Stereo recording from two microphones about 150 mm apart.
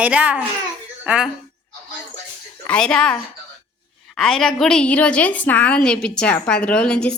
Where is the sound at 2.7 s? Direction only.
5° left (ahead or behind).